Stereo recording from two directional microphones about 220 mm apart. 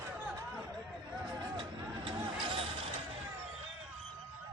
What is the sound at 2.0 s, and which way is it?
Music, 20° right (ahead or behind).